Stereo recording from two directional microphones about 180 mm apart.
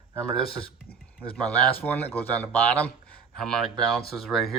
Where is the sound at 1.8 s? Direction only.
10° left (ahead or behind).